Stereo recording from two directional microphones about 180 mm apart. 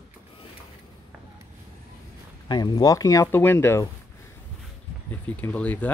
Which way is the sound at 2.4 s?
25° left (ahead or behind).